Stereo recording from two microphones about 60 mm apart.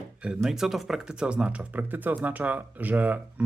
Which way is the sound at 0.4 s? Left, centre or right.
Centre.